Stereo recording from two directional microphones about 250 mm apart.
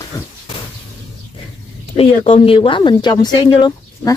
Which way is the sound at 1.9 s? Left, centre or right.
Left.